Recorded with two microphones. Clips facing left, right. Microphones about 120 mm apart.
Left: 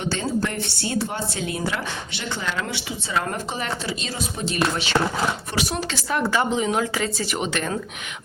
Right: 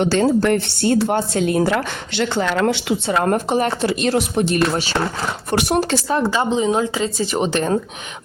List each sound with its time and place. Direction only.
0.0 s speech: 70° right (ahead or behind)
0.3 s speech: 60° right (ahead or behind)
4.7 s speech: 40° right (ahead or behind)
5.5 s speech: 60° right (ahead or behind)
5.9 s speech: 30° right (ahead or behind)
7.3 s speech: 35° right (ahead or behind)